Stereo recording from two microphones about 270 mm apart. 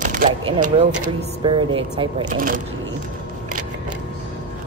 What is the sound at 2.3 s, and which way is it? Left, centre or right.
Speech, right.